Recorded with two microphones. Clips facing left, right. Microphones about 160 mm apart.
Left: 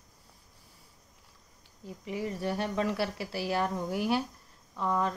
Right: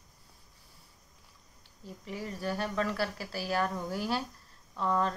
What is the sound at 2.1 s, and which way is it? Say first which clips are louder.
Speech: left 3 dB; 20° left (ahead or behind).